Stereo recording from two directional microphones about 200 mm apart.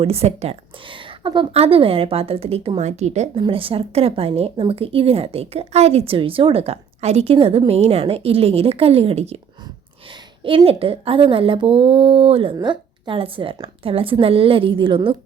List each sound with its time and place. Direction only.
0.0 s speech: 30° right (ahead or behind)
10.4 s speech: 25° right (ahead or behind)